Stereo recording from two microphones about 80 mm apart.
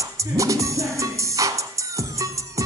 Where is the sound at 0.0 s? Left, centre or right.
Right.